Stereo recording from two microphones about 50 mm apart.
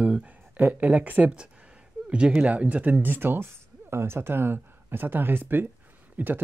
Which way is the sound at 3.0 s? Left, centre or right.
Right.